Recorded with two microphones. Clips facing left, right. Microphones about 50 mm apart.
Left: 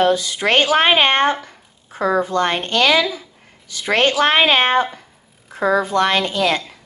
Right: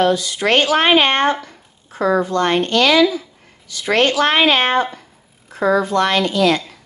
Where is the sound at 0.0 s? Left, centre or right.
Left.